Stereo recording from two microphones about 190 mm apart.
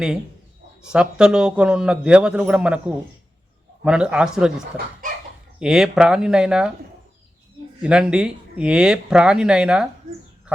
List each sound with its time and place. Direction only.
0.9 s speech: 5° right (ahead or behind)
5.0 s dog: 45° right (ahead or behind)
5.5 s speech: 5° right (ahead or behind)
7.8 s speech: 5° right (ahead or behind)